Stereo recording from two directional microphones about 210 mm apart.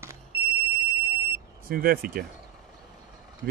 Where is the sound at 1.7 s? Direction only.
45° right (ahead or behind).